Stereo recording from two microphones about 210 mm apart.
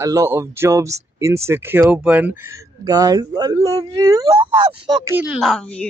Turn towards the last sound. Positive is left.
turn(degrees=5)  # may be behind; listen again after turning